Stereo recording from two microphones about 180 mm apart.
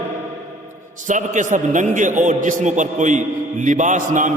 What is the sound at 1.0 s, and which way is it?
A man's voice, 45° right (ahead or behind).